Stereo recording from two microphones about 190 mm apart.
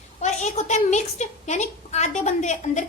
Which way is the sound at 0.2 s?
40° left (ahead or behind).